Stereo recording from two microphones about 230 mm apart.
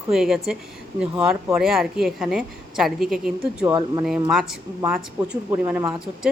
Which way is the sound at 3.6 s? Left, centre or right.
Centre.